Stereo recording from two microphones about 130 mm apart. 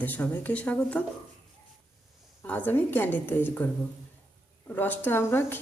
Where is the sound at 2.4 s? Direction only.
15° left (ahead or behind).